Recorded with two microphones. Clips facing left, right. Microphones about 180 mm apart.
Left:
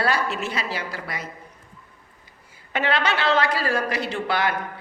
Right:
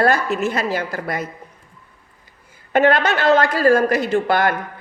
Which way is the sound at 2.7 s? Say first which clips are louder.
Right 8 dB; 50° right (ahead or behind).